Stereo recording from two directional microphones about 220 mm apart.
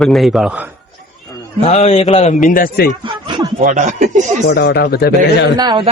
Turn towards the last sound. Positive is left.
turn(degrees=-20)  # may be behind; listen again after turning